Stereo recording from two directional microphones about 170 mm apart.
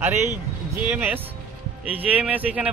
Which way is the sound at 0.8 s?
10° right (ahead or behind).